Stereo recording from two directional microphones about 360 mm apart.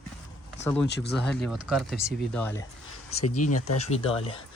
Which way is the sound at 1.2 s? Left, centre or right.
Centre.